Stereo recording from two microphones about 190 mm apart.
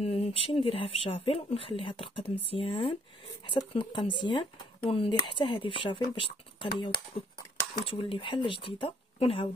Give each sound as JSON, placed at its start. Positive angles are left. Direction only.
{"t": 0.0, "sound": "speech", "side_deg": 30}